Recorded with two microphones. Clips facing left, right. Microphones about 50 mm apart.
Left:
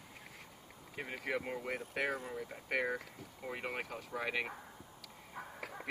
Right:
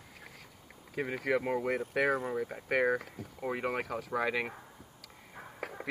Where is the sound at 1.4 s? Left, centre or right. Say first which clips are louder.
Right 8 dB; right.